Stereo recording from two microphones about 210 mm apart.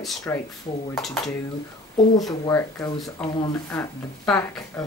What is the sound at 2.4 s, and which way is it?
Speech, 15° left (ahead or behind).